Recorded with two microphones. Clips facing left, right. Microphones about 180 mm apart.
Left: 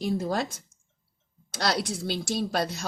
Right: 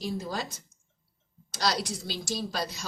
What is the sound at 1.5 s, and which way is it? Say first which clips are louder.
Speech: left 2 dB; 55° left (ahead or behind).